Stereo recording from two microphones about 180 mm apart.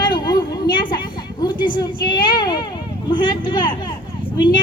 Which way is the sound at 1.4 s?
25° left (ahead or behind).